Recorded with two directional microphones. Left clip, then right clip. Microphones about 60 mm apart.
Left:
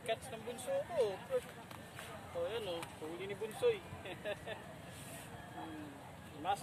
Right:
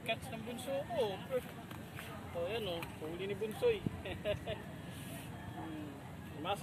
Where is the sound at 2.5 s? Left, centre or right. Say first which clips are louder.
Right 1 dB; left.